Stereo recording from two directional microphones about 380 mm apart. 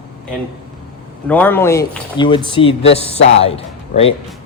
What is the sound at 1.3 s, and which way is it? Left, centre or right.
Speech, centre.